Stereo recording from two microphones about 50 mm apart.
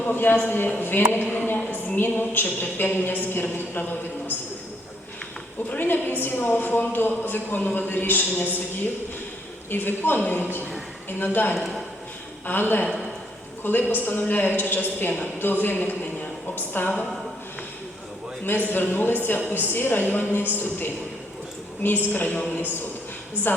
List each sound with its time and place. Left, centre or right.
0.1 s a woman's voice: left
1.5 s a sound: left
2.0 s a woman's voice: left
5.7 s speech: left
9.6 s a woman's voice: left
18.7 s a woman's voice: left
23.5 s a woman's voice: left